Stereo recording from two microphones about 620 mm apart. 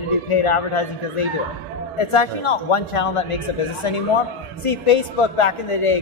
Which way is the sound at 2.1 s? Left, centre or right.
Left.